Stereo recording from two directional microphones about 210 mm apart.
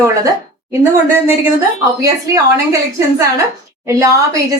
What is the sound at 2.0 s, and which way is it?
Speech, 15° right (ahead or behind).